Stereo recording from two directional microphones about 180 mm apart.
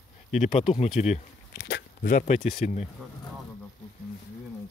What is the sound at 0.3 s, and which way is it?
Speech, 40° left (ahead or behind).